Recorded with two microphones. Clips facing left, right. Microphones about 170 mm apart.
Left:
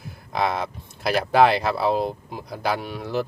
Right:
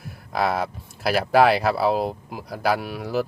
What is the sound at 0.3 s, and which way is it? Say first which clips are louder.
Speech: right 1 dB; 5° right (ahead or behind).